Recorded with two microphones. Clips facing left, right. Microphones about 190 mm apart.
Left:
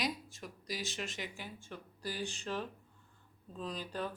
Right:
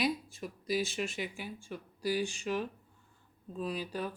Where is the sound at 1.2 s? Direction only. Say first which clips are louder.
Right 5 dB; 15° right (ahead or behind).